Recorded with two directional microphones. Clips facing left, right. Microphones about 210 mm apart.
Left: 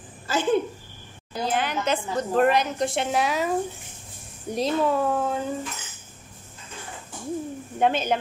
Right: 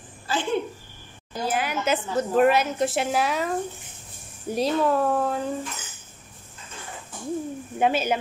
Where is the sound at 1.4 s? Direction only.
5° right (ahead or behind).